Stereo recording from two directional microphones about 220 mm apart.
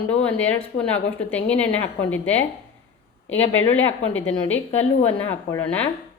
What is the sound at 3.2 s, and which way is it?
Speech, 60° left (ahead or behind).